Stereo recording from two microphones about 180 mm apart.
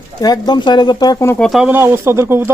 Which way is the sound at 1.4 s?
Centre (ahead or behind).